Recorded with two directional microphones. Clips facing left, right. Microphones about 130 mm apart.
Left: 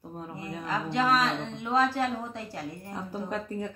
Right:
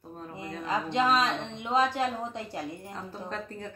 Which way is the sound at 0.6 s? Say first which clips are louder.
Right 1 dB; 20° right (ahead or behind).